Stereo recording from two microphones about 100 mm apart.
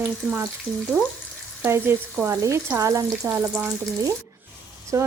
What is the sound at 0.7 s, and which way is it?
Speech, 40° right (ahead or behind).